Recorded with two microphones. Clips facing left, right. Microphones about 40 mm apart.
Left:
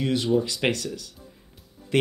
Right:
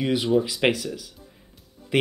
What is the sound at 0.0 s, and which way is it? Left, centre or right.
Speech, centre.